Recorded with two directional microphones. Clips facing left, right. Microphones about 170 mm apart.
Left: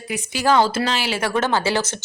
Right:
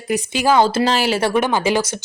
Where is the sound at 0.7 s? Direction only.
30° right (ahead or behind).